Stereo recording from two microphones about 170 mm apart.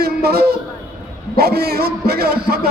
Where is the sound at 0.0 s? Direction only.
65° right (ahead or behind).